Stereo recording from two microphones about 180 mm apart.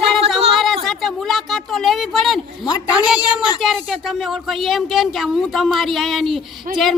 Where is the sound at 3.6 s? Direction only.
Centre (ahead or behind).